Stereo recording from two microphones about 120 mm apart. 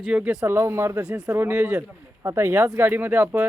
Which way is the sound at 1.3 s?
15° right (ahead or behind).